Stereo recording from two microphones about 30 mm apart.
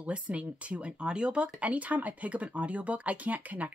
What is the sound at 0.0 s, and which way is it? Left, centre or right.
Speech, right.